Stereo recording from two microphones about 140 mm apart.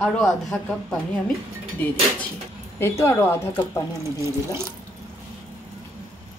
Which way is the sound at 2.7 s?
20° left (ahead or behind).